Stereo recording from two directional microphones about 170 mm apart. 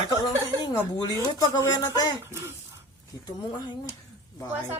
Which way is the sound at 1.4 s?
25° left (ahead or behind).